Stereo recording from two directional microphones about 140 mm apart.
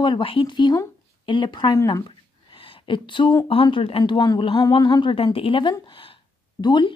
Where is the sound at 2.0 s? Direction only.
35° left (ahead or behind).